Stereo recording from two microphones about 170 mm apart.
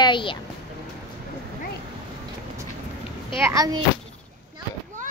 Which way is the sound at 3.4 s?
15° right (ahead or behind).